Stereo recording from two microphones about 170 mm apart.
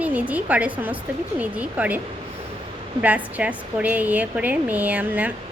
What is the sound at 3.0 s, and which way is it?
Speech, 10° right (ahead or behind).